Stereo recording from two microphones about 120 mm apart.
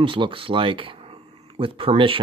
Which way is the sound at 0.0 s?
45° right (ahead or behind).